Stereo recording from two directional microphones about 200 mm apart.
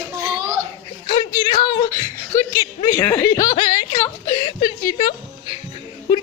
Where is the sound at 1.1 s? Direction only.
25° left (ahead or behind).